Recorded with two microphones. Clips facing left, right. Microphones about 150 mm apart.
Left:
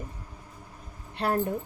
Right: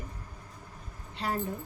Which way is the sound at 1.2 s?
60° left (ahead or behind).